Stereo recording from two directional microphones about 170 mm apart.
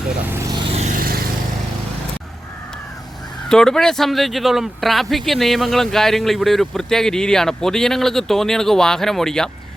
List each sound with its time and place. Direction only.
0.3 s speech: 15° right (ahead or behind)
0.5 s vehicle: 35° right (ahead or behind); by 1.2 s 55° right (ahead or behind)
3.5 s speech: 5° left (ahead or behind)